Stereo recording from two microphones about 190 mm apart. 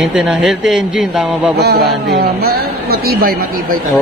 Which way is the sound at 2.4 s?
55° right (ahead or behind).